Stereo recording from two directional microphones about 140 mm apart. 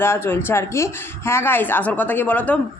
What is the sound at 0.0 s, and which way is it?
Speech, 15° left (ahead or behind).